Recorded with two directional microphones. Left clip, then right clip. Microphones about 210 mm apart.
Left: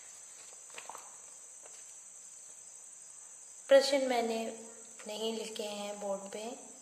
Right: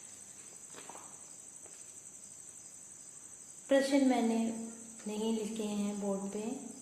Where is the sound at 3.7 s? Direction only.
30° left (ahead or behind).